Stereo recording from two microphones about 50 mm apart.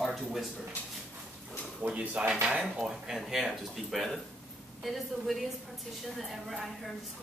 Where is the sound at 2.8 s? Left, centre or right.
Centre.